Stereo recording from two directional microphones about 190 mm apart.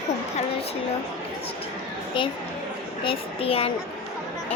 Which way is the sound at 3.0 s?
30° left (ahead or behind).